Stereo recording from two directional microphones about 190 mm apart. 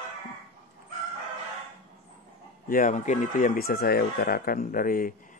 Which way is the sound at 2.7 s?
40° left (ahead or behind).